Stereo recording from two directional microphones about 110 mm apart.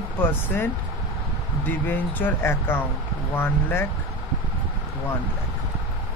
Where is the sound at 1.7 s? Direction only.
15° left (ahead or behind).